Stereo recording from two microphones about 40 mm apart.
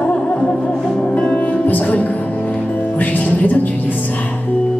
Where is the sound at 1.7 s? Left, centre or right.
Left.